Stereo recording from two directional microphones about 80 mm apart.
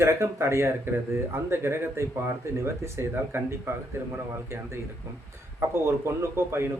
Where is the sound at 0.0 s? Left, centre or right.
Right.